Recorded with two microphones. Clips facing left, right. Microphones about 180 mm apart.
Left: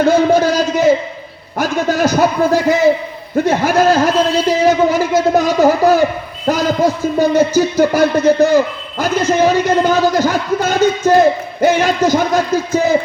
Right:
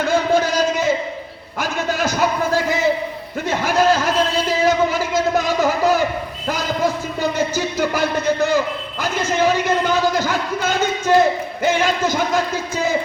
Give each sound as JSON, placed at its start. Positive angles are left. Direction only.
{"t": 0.0, "sound": "a sound", "side_deg": 40}
{"t": 1.5, "sound": "a man's voice", "side_deg": 40}
{"t": 3.3, "sound": "a man's voice", "side_deg": 40}